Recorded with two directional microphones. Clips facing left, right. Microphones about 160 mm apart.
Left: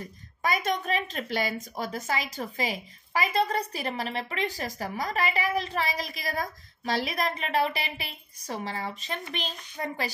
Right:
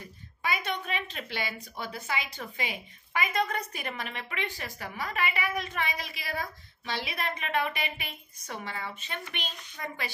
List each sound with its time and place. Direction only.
0.4 s a woman's voice: 40° left (ahead or behind)